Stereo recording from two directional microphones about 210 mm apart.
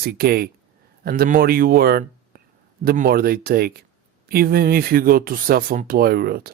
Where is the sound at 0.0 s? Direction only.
50° right (ahead or behind).